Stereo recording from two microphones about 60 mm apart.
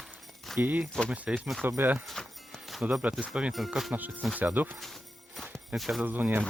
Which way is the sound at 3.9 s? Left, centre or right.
Right.